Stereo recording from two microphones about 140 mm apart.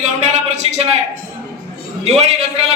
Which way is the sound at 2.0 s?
50° right (ahead or behind).